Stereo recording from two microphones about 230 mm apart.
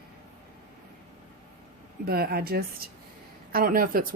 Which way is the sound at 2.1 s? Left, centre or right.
Right.